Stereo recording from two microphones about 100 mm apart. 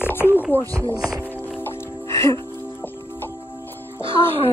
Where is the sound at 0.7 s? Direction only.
30° right (ahead or behind).